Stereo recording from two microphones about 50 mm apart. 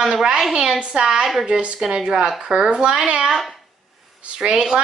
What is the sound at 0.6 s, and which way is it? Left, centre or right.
Speech, centre.